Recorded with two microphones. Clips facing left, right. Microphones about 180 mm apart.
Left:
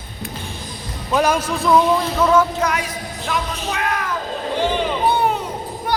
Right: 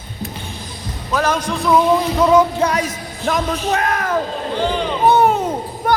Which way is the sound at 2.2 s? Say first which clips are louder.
Right 3 dB; 15° right (ahead or behind).